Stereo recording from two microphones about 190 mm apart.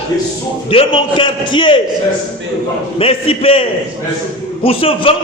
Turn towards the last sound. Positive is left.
turn(degrees=30)  # may be behind; listen again after turning